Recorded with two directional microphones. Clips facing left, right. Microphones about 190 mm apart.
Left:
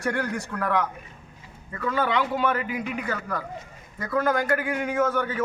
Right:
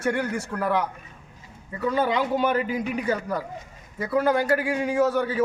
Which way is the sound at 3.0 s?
15° right (ahead or behind).